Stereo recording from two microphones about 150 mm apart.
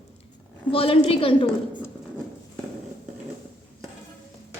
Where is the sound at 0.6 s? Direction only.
40° left (ahead or behind).